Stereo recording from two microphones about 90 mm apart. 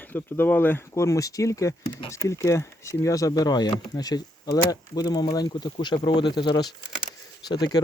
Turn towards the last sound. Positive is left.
turn(degrees=50)  # may be behind; listen again after turning